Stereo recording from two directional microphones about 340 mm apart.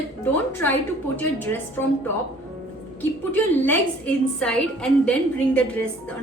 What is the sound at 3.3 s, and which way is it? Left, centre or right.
A woman's voice, centre.